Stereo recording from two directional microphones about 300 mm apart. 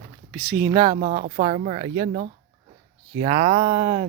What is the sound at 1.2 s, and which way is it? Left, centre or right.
Speech, right.